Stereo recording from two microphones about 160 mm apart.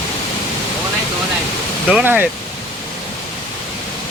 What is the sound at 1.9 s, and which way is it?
Speech, 5° right (ahead or behind).